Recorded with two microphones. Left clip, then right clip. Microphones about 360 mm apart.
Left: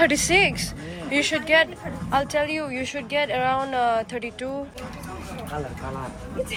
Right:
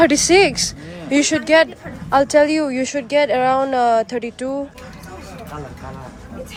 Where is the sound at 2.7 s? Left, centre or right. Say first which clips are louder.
Right 8 dB; right.